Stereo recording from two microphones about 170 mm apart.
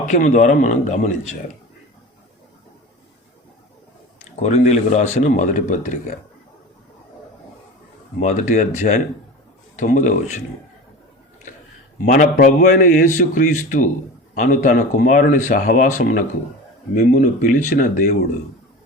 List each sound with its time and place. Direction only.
0.0 s a man's voice: 50° left (ahead or behind)
4.4 s a man's voice: 45° left (ahead or behind)
8.2 s a man's voice: 45° left (ahead or behind)
12.0 s a man's voice: 50° left (ahead or behind)